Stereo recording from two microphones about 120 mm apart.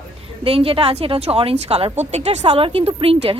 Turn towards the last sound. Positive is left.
turn(degrees=-50)  # may be behind; listen again after turning